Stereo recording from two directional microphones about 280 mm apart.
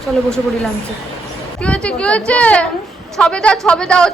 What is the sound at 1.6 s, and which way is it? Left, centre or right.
A woman's voice, centre.